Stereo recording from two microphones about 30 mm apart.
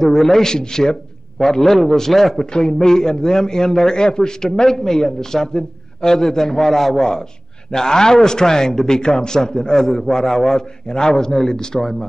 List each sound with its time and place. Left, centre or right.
0.0 s a man's voice: centre
2.4 s a man's voice: left